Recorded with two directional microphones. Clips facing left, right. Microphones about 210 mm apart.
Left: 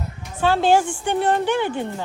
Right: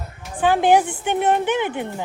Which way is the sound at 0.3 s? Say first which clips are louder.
Right 1 dB; 15° right (ahead or behind).